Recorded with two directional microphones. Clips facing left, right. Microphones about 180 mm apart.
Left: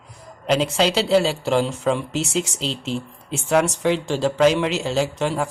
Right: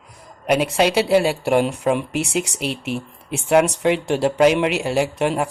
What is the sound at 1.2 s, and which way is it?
Speech, 60° right (ahead or behind).